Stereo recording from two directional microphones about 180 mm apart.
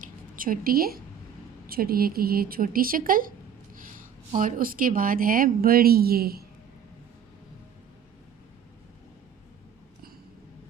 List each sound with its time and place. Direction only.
0.0 s a woman's voice: 50° right (ahead or behind)
3.8 s a sound: 50° right (ahead or behind)
4.4 s speech: 50° right (ahead or behind)